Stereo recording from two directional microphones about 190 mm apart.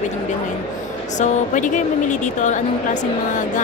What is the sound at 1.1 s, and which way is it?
A woman's voice, 40° left (ahead or behind).